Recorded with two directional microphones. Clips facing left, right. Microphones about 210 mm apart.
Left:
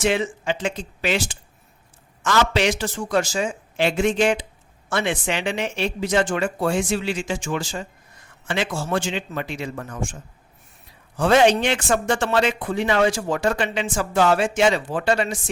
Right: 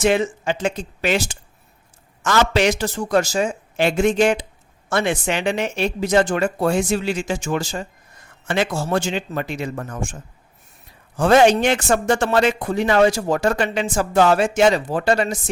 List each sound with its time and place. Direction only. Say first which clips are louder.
0.0 s a man's voice: right 3 dB; 45° right (ahead or behind)
11.2 s speech: right 3 dB; 45° right (ahead or behind)